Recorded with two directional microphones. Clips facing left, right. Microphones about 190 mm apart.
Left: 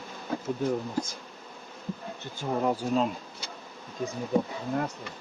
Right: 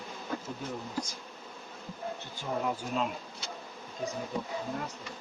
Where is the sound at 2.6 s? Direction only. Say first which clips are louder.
Left 8 dB; 35° left (ahead or behind).